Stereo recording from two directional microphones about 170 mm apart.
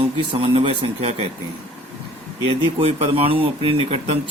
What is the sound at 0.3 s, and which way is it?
Speech, 30° right (ahead or behind).